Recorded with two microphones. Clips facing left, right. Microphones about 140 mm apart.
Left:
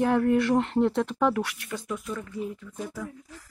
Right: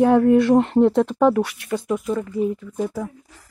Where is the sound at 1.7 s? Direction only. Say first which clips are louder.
Right 10 dB; 45° right (ahead or behind).